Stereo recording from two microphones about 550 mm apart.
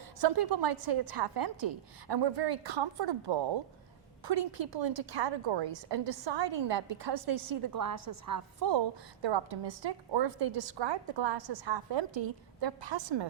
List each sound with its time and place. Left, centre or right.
0.2 s a woman's voice: right
7.8 s a woman's voice: right